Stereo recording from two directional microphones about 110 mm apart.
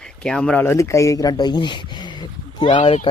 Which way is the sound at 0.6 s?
25° left (ahead or behind).